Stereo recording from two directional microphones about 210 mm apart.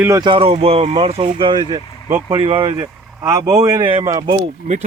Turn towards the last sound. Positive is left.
turn(degrees=-30)  # may be behind; listen again after turning